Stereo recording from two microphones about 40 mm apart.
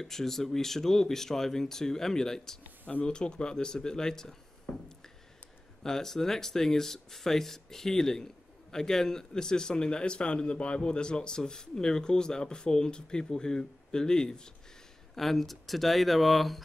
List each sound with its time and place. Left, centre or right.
0.0 s speech: centre
4.7 s a sound: left
5.9 s speech: centre
15.1 s speech: centre